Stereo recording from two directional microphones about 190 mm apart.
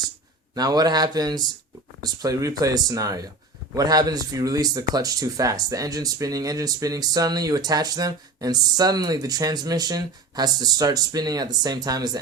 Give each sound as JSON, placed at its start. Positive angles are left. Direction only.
{"t": 0.5, "sound": "speech", "side_deg": -20}